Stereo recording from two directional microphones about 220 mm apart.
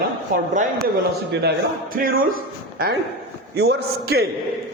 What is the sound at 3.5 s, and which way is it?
Speech, 45° right (ahead or behind).